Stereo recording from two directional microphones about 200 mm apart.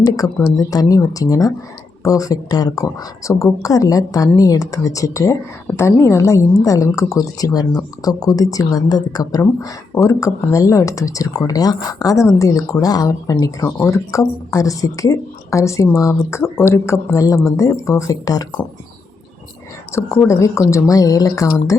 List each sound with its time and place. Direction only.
0.0 s a woman's voice: 15° left (ahead or behind)
19.9 s a woman's voice: 15° left (ahead or behind)